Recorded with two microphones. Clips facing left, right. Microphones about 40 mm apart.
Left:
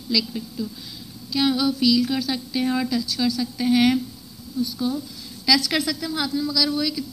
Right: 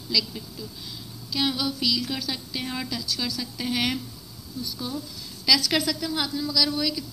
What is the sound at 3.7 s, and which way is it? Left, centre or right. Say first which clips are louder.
Speech: left 9 dB; centre.